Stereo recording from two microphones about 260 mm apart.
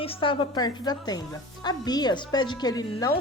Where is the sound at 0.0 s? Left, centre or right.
Left.